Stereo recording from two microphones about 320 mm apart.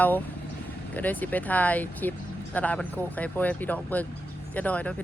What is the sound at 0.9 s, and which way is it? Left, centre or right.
Speech, centre.